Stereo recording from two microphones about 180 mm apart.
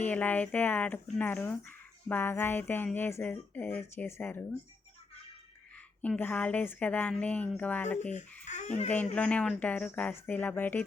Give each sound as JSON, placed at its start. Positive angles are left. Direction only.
{"t": 0.0, "sound": "speech", "side_deg": 10}
{"t": 6.0, "sound": "speech", "side_deg": 10}
{"t": 8.4, "sound": "speech", "side_deg": 40}
{"t": 9.1, "sound": "speech", "side_deg": 5}